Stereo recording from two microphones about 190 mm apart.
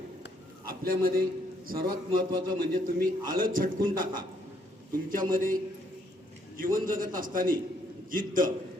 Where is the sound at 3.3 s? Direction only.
45° right (ahead or behind).